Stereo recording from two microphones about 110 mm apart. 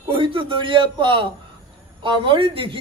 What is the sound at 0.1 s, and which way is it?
A man's voice, 50° right (ahead or behind).